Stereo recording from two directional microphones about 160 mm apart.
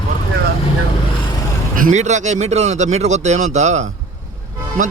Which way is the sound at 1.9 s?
45° right (ahead or behind).